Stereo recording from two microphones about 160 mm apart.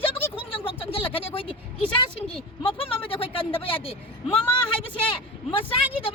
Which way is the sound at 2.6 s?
35° left (ahead or behind).